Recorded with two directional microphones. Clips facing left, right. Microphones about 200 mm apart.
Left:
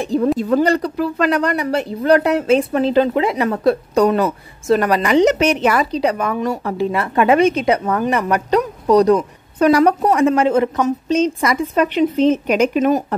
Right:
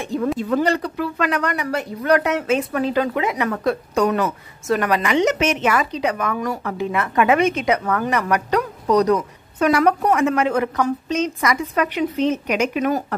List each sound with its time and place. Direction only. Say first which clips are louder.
0.0 s speech: left 5 dB; 35° left (ahead or behind)